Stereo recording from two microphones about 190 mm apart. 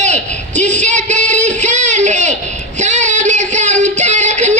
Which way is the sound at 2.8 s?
40° right (ahead or behind).